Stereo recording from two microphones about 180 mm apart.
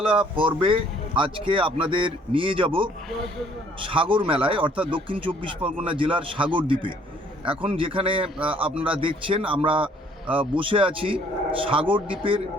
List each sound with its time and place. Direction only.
0.0 s speech: 30° right (ahead or behind)